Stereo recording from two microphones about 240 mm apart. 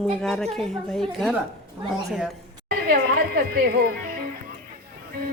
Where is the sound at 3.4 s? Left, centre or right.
Right.